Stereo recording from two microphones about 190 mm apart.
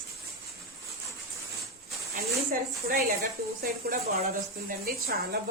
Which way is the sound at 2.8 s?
55° right (ahead or behind).